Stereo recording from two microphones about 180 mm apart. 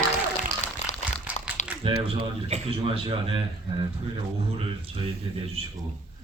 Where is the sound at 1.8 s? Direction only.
30° right (ahead or behind).